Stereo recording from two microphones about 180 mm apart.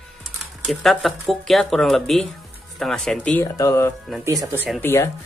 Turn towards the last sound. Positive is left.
turn(degrees=15)  # may be behind; listen again after turning